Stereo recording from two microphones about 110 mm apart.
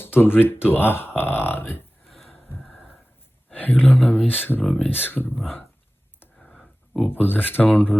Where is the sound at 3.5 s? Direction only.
15° left (ahead or behind).